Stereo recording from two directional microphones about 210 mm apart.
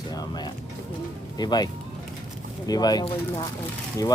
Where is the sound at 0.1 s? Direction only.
20° left (ahead or behind).